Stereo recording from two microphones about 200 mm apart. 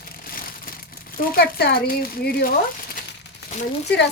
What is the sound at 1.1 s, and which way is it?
Speech, 45° left (ahead or behind).